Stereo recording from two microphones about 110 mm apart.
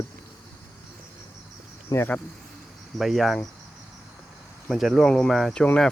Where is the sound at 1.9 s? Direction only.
30° left (ahead or behind).